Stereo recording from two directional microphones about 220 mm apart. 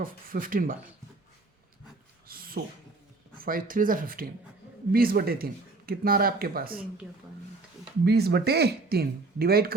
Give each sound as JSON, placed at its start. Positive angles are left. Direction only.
{"t": 0.0, "sound": "speech", "side_deg": -40}
{"t": 2.2, "sound": "a sound", "side_deg": -40}
{"t": 3.3, "sound": "speech", "side_deg": -40}
{"t": 8.0, "sound": "speech", "side_deg": -50}